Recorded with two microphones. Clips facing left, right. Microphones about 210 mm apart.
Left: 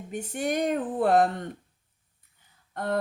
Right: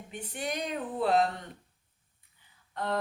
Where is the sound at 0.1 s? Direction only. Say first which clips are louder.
Left 7 dB; 45° left (ahead or behind).